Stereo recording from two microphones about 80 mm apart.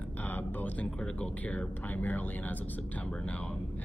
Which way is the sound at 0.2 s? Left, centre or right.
Left.